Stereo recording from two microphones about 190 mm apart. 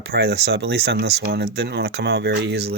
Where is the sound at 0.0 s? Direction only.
60° right (ahead or behind).